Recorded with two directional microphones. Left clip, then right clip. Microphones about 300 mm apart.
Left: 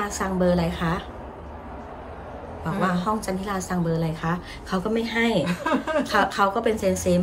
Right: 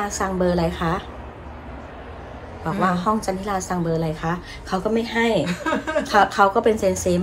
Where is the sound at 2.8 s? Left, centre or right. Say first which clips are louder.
Right 4 dB; centre.